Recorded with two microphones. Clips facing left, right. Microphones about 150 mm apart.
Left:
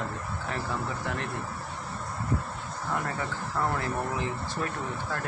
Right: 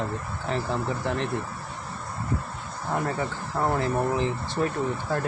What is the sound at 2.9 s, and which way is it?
Speech, 30° right (ahead or behind).